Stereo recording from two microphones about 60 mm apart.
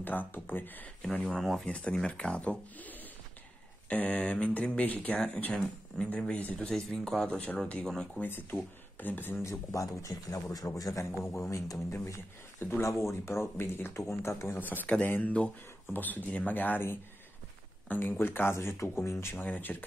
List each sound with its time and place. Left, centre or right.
0.0 s speech: left
1.2 s speech: centre
1.7 s speech: left
6.7 s speech: centre
7.2 s speech: left
7.8 s speech: centre
8.2 s speech: left
9.4 s speech: left
10.8 s speech: left
11.2 s speech: left
11.9 s speech: left
15.0 s speech: left
19.3 s speech: left